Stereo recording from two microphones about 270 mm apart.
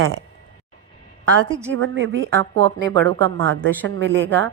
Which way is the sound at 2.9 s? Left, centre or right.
Centre.